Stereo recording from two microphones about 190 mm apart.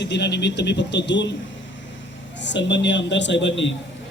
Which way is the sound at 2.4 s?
70° left (ahead or behind).